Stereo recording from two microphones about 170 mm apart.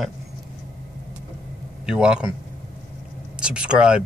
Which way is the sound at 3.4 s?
5° right (ahead or behind).